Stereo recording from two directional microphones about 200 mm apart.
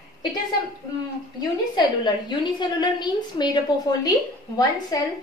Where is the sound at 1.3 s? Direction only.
20° left (ahead or behind).